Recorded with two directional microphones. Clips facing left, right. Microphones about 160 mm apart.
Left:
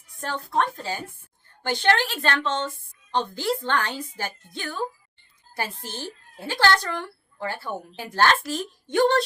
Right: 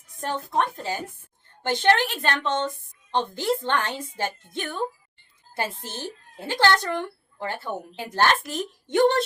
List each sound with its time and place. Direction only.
0.2 s a woman's voice: 20° right (ahead or behind)